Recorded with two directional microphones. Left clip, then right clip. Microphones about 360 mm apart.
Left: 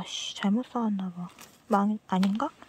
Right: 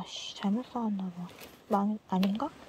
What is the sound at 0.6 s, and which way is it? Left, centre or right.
Speech, left.